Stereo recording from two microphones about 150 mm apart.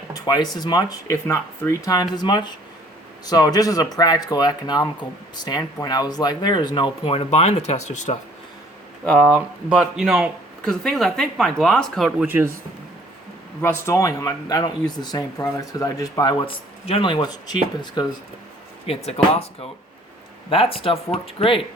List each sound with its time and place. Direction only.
0.1 s speech: 25° left (ahead or behind); by 8.1 s 50° left (ahead or behind)
9.0 s speech: 5° left (ahead or behind)
13.6 s speech: 15° left (ahead or behind)
16.5 s speech: 40° left (ahead or behind)
18.9 s speech: 40° left (ahead or behind)
20.5 s speech: 35° left (ahead or behind)